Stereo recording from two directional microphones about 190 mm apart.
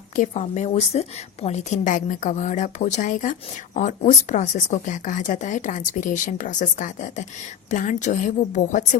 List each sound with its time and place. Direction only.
0.2 s a woman's voice: 40° left (ahead or behind)